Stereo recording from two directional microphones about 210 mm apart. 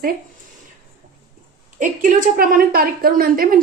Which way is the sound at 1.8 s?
40° right (ahead or behind).